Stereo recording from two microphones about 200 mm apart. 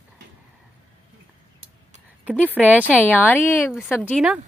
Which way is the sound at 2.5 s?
10° right (ahead or behind).